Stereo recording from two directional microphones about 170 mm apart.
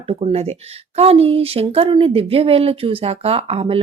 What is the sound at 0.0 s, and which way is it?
Speech, 30° right (ahead or behind).